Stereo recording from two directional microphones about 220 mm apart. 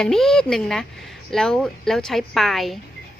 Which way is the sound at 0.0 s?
Centre (ahead or behind).